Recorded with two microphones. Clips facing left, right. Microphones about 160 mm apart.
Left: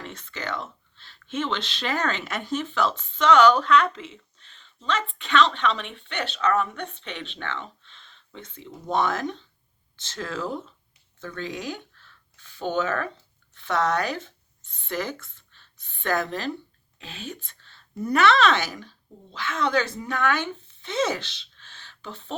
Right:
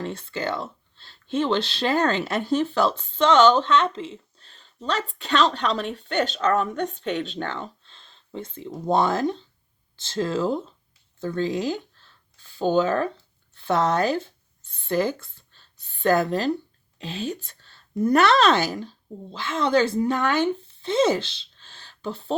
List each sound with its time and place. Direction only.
0.0 s speech: 35° right (ahead or behind)
11.2 s a sound: 30° right (ahead or behind)
13.5 s a woman's voice: 30° right (ahead or behind)